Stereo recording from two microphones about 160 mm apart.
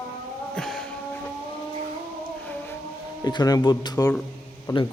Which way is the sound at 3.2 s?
25° left (ahead or behind).